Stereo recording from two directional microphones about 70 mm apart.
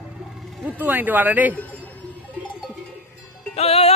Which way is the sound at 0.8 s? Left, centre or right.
Right.